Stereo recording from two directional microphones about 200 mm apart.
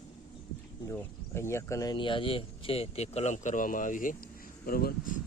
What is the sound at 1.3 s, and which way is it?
Speech, 15° left (ahead or behind).